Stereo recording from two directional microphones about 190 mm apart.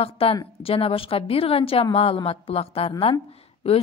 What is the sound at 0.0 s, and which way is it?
A woman's voice, 30° left (ahead or behind).